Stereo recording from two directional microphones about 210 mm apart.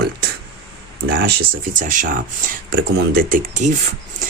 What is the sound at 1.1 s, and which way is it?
Speech, 45° right (ahead or behind).